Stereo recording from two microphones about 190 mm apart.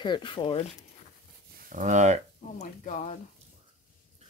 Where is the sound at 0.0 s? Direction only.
25° left (ahead or behind).